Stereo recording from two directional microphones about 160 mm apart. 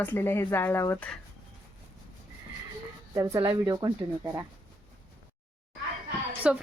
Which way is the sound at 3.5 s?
20° right (ahead or behind).